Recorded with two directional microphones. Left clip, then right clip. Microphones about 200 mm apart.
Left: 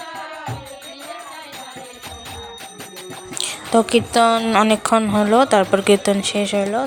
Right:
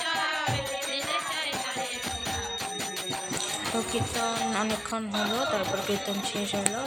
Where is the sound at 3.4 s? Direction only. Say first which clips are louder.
Left 7 dB; 50° left (ahead or behind).